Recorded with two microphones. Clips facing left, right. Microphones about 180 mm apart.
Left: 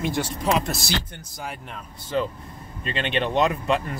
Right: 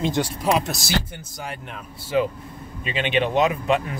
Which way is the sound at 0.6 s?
Centre (ahead or behind).